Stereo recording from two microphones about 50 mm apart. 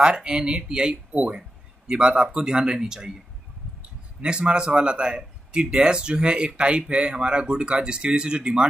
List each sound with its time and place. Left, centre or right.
0.0 s speech: centre
1.1 s speech: right
4.2 s speech: right